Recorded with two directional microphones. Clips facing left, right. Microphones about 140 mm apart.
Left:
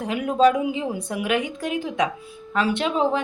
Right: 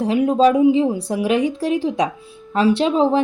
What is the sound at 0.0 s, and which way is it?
Speech, 30° right (ahead or behind).